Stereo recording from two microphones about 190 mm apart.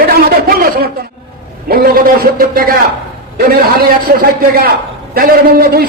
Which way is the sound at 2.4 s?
50° right (ahead or behind).